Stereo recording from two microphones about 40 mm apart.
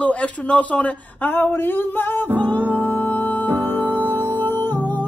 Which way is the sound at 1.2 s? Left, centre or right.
Left.